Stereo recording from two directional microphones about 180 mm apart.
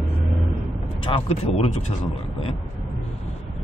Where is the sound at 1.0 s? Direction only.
30° left (ahead or behind).